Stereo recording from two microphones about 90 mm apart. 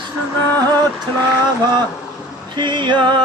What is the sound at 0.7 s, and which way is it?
Speech, 50° right (ahead or behind).